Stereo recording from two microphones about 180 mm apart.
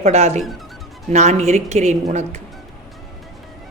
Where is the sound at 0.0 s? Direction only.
40° right (ahead or behind).